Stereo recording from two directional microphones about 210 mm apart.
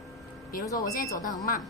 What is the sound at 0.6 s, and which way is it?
Speech, 15° left (ahead or behind).